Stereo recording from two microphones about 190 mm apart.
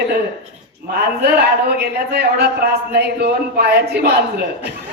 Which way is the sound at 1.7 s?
60° right (ahead or behind).